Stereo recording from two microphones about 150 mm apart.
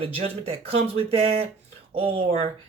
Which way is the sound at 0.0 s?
40° right (ahead or behind).